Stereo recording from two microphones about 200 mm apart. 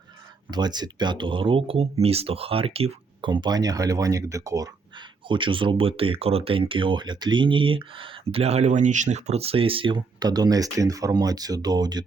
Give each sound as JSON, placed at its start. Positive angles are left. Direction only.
{"t": 0.5, "sound": "speech", "side_deg": -20}